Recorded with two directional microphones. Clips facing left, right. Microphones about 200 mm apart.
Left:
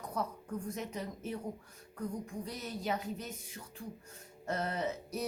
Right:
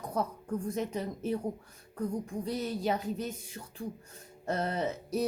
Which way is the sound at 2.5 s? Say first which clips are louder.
Right 7 dB; 30° right (ahead or behind).